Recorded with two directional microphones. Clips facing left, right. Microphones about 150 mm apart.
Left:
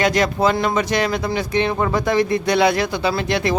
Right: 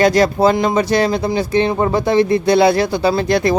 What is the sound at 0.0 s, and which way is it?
Speech, 35° right (ahead or behind).